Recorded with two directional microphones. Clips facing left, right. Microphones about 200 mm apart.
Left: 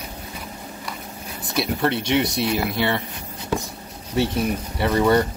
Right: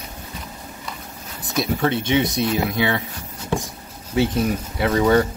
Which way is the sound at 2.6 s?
20° right (ahead or behind).